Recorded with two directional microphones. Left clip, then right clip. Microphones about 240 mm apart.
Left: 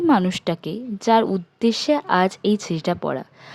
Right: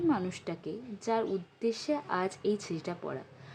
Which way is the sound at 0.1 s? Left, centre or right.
Left.